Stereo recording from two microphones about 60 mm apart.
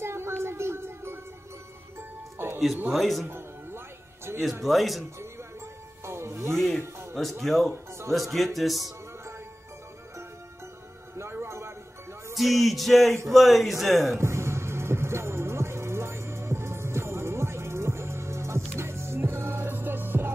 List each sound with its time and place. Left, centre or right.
0.0 s music: right
2.9 s a man's voice: centre
3.3 s music: right
4.6 s a man's voice: centre
6.0 s music: right
6.5 s a man's voice: centre
6.8 s speech: right
7.2 s a man's voice: centre
11.1 s music: right
12.4 s a man's voice: centre
14.1 s music: right